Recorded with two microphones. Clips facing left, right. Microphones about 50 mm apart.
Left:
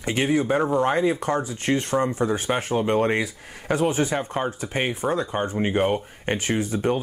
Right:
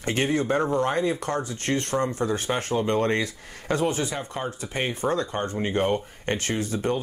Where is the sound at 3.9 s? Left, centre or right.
Left.